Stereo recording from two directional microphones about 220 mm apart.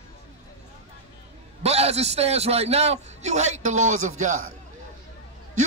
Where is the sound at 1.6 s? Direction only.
30° right (ahead or behind).